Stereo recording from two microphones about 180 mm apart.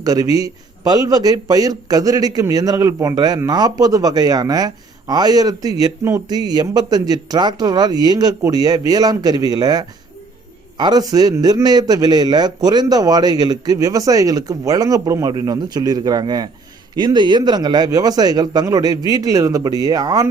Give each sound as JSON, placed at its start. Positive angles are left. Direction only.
{"t": 0.0, "sound": "a man's voice", "side_deg": -20}